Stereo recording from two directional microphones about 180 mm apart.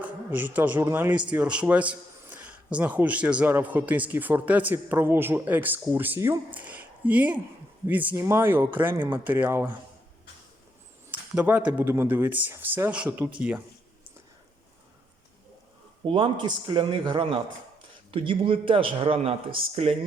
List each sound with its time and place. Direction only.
0.0 s a man's voice: 10° right (ahead or behind)
11.1 s a man's voice: 10° right (ahead or behind)
16.0 s a man's voice: 30° right (ahead or behind)